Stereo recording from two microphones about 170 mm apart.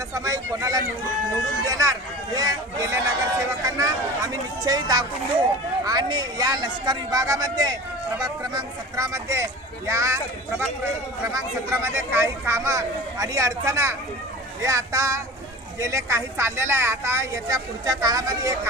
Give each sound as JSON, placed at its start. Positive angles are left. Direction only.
{"t": 0.1, "sound": "speech", "side_deg": -20}
{"t": 11.7, "sound": "speech", "side_deg": -15}